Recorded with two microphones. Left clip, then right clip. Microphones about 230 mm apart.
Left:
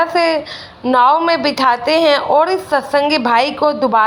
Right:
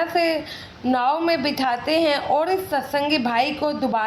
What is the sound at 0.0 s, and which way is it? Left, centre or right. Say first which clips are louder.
A woman's voice: left 7 dB; centre.